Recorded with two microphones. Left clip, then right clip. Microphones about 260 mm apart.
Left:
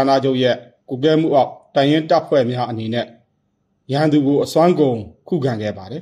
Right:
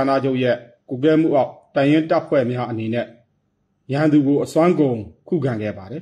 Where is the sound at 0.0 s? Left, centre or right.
Left.